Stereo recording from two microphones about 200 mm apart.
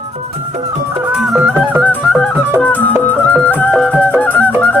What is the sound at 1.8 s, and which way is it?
Music, 5° left (ahead or behind).